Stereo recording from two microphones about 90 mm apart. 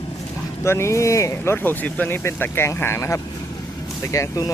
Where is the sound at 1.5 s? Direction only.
20° left (ahead or behind); by 4.5 s 40° left (ahead or behind).